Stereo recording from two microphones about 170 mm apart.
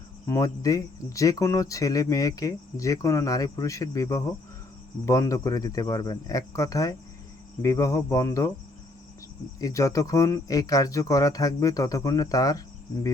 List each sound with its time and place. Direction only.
0.3 s speech: 20° left (ahead or behind)
9.6 s speech: 20° left (ahead or behind)